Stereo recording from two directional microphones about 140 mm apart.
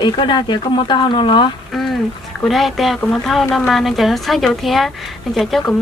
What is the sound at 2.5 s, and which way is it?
A woman's voice, centre (ahead or behind).